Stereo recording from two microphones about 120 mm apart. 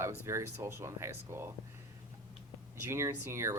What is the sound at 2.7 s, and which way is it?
Speech, 25° right (ahead or behind).